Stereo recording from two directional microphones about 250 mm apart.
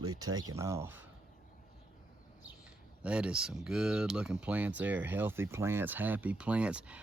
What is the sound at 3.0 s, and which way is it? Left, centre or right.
Speech, centre.